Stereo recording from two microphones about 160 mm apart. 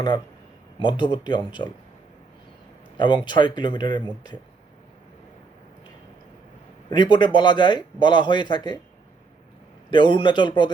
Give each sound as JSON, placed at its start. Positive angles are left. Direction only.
{"t": 0.8, "sound": "a man's voice", "side_deg": 30}
{"t": 3.2, "sound": "a man's voice", "side_deg": 30}
{"t": 6.9, "sound": "a man's voice", "side_deg": 30}
{"t": 9.9, "sound": "a man's voice", "side_deg": 30}